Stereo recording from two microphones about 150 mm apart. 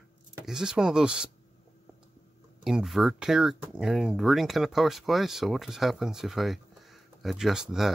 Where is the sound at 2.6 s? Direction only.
Centre (ahead or behind).